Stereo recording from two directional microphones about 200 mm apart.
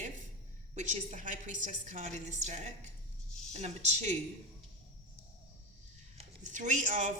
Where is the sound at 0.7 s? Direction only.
35° right (ahead or behind).